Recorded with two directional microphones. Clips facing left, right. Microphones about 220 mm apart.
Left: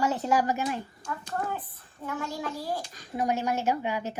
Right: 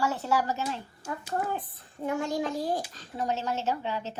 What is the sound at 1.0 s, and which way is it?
Speech, 10° right (ahead or behind).